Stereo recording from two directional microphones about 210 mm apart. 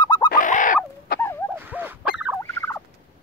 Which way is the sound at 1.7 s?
10° right (ahead or behind).